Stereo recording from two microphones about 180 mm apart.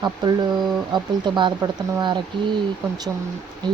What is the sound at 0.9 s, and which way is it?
Speech, 25° right (ahead or behind).